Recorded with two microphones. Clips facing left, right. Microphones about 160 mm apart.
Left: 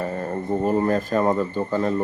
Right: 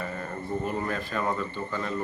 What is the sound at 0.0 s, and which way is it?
Speech, 35° left (ahead or behind).